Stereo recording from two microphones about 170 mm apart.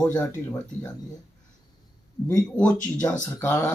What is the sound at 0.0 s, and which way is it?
Speech, 10° left (ahead or behind).